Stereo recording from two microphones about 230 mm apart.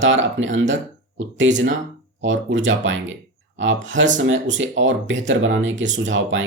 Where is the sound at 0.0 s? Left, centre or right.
Right.